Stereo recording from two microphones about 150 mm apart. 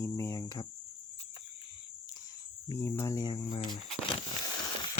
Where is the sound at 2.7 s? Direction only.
20° left (ahead or behind).